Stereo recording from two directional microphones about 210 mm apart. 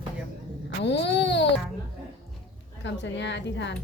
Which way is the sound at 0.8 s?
55° left (ahead or behind).